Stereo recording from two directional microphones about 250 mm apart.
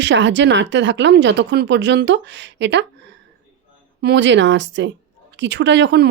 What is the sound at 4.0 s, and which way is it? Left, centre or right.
Speech, right.